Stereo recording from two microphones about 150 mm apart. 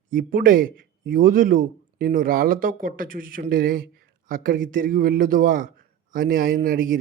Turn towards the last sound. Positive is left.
turn(degrees=-70)  # may be behind; listen again after turning